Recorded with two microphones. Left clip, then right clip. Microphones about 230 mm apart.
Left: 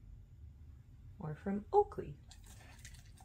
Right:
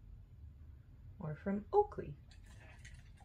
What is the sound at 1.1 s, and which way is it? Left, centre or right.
Speech, left.